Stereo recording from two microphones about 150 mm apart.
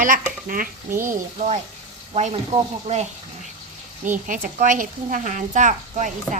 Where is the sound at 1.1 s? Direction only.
50° right (ahead or behind).